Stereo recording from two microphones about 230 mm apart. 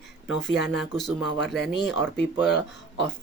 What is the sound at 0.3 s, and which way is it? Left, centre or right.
Speech, centre.